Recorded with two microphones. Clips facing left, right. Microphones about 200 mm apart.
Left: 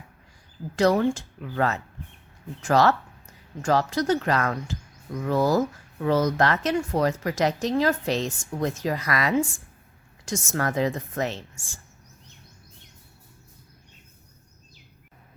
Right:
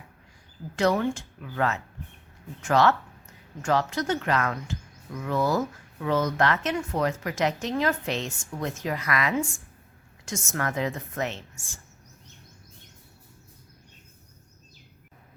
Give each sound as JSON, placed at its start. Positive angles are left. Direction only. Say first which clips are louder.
{"t": 0.8, "sound": "speech", "louder": "left 3 dB", "side_deg": 35}